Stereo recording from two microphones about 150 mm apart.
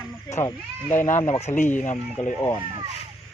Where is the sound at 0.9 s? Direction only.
55° left (ahead or behind).